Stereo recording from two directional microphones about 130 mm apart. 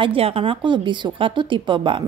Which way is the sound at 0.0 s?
50° right (ahead or behind).